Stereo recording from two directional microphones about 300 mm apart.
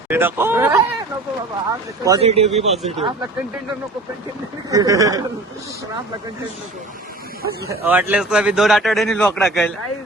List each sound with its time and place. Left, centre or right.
0.1 s speech: centre
2.0 s speech: centre
4.7 s speech: centre
7.7 s a man's voice: centre